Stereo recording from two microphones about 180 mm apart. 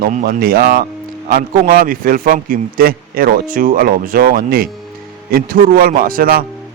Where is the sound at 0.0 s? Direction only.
50° right (ahead or behind).